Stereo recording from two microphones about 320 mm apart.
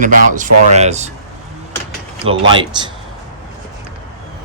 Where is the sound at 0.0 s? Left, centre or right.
Right.